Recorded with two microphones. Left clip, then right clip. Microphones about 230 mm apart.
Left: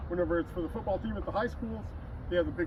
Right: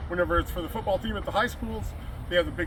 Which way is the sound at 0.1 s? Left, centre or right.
Centre.